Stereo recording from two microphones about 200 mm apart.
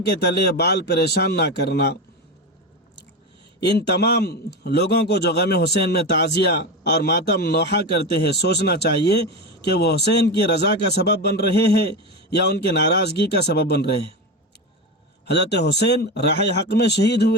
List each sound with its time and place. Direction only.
0.0 s a man's voice: 55° left (ahead or behind)
3.6 s a man's voice: 60° left (ahead or behind)
15.3 s a man's voice: 60° left (ahead or behind)